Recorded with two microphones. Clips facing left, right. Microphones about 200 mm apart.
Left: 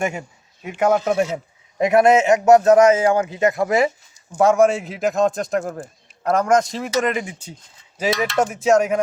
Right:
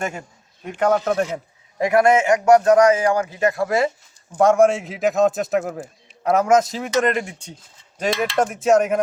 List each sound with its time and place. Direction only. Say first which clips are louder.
0.0 s a man's voice: left 3 dB; 10° left (ahead or behind)
1.8 s a man's voice: left 2 dB; 20° left (ahead or behind)
4.4 s a man's voice: even; centre (ahead or behind)